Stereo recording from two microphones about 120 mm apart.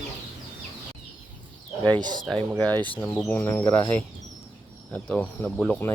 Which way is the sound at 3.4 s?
20° left (ahead or behind).